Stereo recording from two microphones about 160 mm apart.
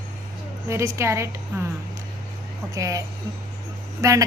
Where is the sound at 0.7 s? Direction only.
20° right (ahead or behind).